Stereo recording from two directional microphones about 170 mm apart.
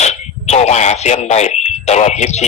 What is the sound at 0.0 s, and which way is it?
Fire alarm, 40° left (ahead or behind).